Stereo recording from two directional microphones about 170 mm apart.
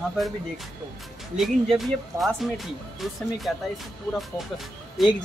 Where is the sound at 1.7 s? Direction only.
Centre (ahead or behind).